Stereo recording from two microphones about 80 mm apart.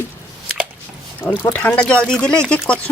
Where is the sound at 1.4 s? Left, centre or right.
Left.